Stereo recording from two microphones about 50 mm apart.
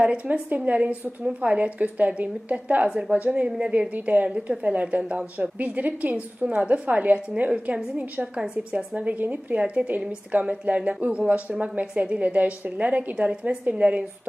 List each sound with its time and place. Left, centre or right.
0.0 s a woman's voice: right
2.8 s a woman's voice: centre
3.1 s a woman's voice: right